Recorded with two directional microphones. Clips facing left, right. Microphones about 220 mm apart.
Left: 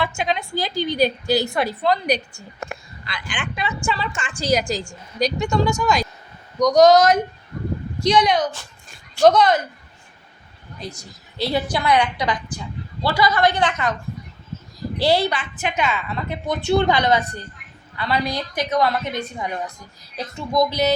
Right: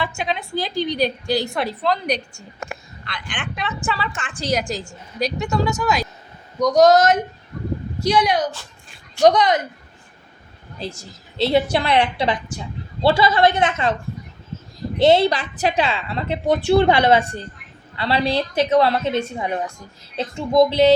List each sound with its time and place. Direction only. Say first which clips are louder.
0.0 s a woman's voice: left 1 dB; centre (ahead or behind); by 9.6 s 15° right (ahead or behind)
10.8 s a woman's voice: right 3 dB; 30° right (ahead or behind)
14.9 s a woman's voice: right 5 dB; 20° right (ahead or behind)
15.3 s a woman's voice: right 5 dB; 35° right (ahead or behind)